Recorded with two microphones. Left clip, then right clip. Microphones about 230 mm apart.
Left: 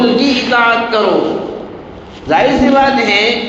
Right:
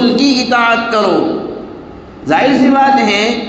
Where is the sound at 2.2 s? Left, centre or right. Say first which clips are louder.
Even; right.